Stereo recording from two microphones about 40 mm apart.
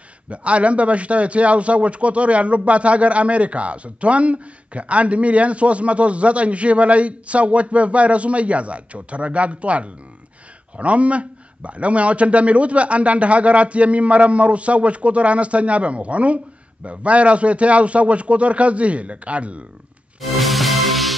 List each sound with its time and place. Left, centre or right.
0.3 s a man's voice: right
20.2 s music: centre